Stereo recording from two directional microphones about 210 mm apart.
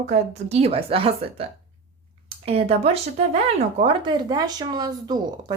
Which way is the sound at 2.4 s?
30° right (ahead or behind).